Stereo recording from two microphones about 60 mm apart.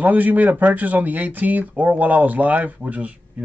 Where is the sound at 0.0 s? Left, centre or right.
Right.